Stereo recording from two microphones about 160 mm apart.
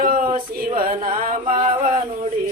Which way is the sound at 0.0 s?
60° right (ahead or behind).